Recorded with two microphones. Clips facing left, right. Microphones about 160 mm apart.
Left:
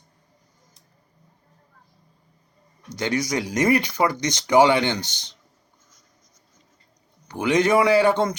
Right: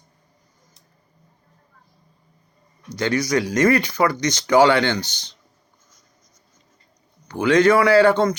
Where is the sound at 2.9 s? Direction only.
20° left (ahead or behind).